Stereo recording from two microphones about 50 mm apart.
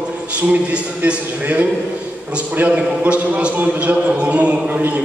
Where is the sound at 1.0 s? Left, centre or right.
Right.